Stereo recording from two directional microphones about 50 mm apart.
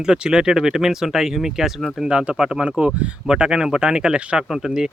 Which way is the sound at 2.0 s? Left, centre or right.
Centre.